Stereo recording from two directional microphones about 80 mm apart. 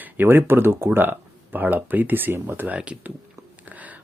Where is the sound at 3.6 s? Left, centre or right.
Centre.